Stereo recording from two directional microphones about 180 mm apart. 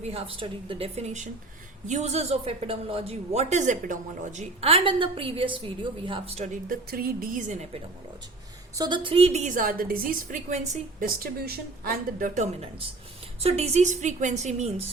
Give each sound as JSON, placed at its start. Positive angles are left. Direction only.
{"t": 0.1, "sound": "a woman's voice", "side_deg": -30}
{"t": 8.7, "sound": "a woman's voice", "side_deg": -25}